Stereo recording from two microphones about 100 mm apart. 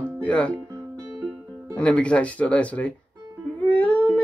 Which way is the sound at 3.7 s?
15° left (ahead or behind).